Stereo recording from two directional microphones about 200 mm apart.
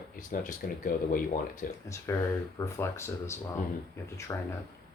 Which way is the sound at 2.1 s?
15° left (ahead or behind).